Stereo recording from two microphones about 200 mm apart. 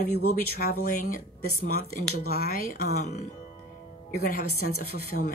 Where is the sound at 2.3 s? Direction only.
45° left (ahead or behind).